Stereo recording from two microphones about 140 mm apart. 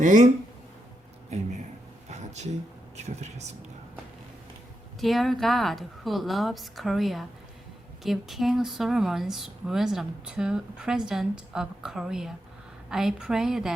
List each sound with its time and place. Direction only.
0.0 s speech: 60° right (ahead or behind)
2.0 s speech: 55° right (ahead or behind)
4.9 s speech: centre (ahead or behind)